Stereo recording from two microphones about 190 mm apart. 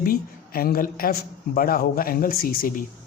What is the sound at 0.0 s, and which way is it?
A woman's voice, 50° left (ahead or behind).